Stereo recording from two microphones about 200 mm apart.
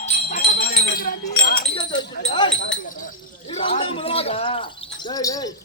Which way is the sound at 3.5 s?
30° left (ahead or behind).